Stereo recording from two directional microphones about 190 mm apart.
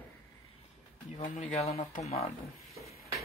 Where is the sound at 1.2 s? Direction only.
40° left (ahead or behind).